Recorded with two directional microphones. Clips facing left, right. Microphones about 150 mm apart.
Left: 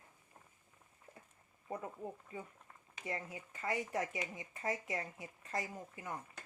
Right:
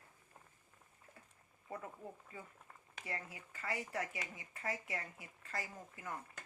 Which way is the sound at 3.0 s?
20° left (ahead or behind).